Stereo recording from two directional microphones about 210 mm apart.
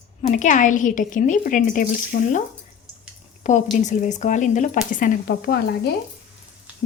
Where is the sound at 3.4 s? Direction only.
35° left (ahead or behind).